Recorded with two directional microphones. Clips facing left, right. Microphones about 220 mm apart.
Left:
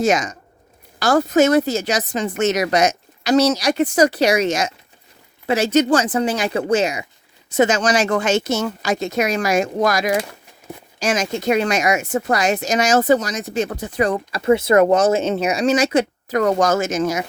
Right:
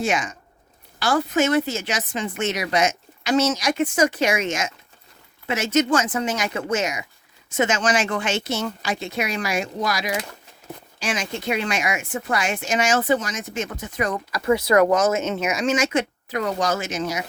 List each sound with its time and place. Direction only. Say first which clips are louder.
0.0 s speech: left 6 dB; 40° left (ahead or behind)